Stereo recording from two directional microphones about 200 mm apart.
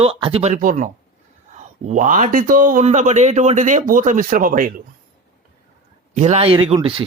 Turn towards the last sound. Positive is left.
turn(degrees=-25)  # may be behind; listen again after turning